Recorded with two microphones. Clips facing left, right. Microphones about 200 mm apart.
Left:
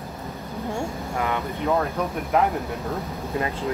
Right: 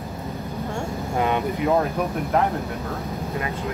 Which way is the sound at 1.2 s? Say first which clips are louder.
Right 4 dB; 20° right (ahead or behind).